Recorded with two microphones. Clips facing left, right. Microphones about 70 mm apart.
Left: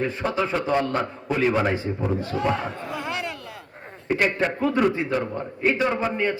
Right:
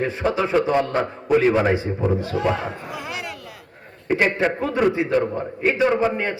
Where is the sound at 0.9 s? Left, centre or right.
Centre.